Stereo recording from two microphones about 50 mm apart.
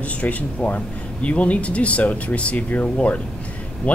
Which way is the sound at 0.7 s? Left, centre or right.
Left.